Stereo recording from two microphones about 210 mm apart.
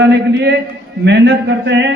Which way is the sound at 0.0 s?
55° right (ahead or behind).